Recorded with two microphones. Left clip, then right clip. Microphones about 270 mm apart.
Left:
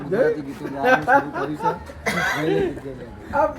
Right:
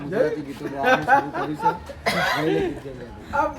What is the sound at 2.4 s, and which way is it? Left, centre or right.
Speech, centre.